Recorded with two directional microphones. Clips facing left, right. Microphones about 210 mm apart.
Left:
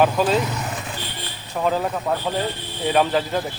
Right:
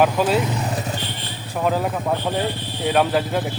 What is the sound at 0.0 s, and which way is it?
Speech, 10° right (ahead or behind).